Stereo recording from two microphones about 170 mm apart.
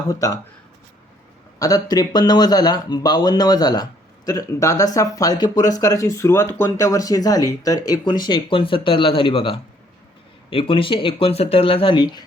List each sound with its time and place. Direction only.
0.1 s speech: 20° left (ahead or behind)
1.5 s speech: 20° left (ahead or behind)